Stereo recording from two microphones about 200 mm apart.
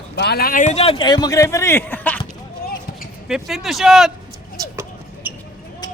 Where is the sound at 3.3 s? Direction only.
Centre (ahead or behind).